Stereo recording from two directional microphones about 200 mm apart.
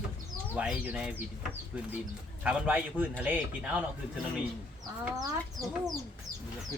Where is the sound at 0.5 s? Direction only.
5° right (ahead or behind).